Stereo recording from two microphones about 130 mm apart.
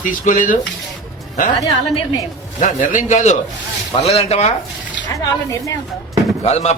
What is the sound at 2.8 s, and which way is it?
Speech, 75° left (ahead or behind).